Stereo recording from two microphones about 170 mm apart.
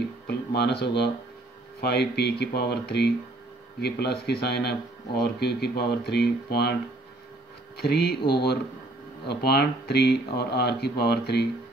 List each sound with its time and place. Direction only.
0.3 s speech: 75° left (ahead or behind)
7.7 s speech: 70° left (ahead or behind)